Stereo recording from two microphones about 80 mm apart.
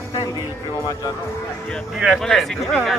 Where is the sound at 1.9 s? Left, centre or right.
Centre.